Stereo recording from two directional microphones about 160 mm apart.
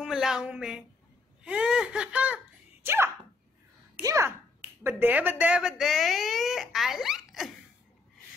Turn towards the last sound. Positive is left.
turn(degrees=0)  # may be behind; listen again after turning